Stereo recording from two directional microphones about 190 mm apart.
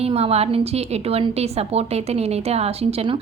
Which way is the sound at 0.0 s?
30° right (ahead or behind).